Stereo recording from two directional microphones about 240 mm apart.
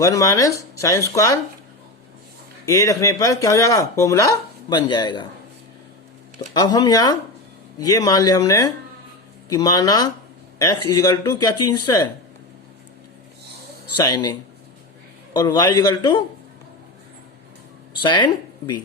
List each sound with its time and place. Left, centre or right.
0.0 s speech: centre
2.6 s speech: centre
6.5 s speech: centre
13.9 s speech: centre
18.0 s speech: centre